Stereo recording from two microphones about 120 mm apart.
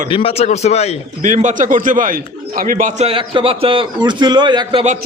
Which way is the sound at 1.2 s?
90° right.